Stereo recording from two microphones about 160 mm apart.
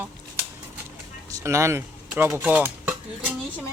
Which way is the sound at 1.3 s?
20° right (ahead or behind).